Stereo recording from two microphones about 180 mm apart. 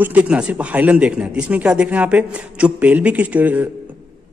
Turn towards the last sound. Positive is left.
turn(degrees=-10)  # may be behind; listen again after turning